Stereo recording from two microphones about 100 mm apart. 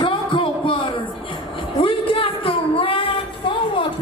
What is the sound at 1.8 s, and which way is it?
Music, 60° left (ahead or behind).